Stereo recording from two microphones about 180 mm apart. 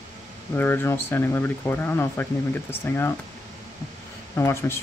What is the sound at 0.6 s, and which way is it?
Speech, 10° left (ahead or behind).